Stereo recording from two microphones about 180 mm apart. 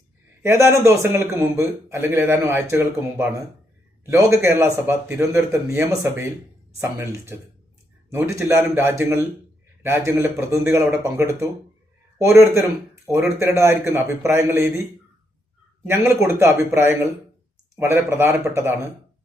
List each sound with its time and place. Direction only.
0.4 s a man's voice: 15° right (ahead or behind)
15.9 s a man's voice: 15° right (ahead or behind)